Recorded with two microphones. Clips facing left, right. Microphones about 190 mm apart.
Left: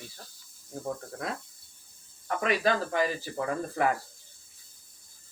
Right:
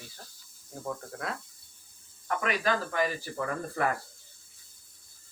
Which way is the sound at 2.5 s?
30° left (ahead or behind).